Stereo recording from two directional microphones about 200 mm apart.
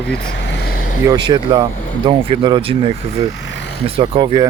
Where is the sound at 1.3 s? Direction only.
20° right (ahead or behind).